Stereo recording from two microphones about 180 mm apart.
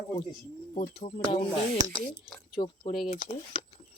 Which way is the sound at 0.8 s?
35° left (ahead or behind).